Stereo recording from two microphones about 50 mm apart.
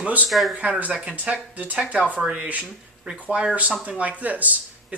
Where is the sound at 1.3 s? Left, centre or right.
Centre.